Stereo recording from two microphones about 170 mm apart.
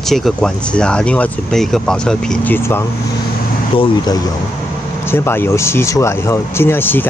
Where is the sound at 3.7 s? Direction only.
25° left (ahead or behind).